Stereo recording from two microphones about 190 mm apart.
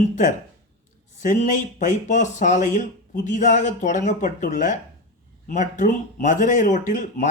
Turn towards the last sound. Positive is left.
turn(degrees=40)  # may be behind; listen again after turning